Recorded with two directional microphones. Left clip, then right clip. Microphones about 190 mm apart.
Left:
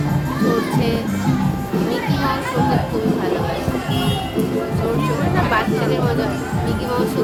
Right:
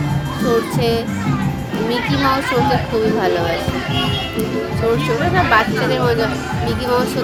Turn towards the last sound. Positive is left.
turn(degrees=-40)  # may be behind; listen again after turning